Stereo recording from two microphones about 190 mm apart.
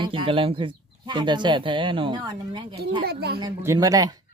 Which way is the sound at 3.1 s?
55° right (ahead or behind).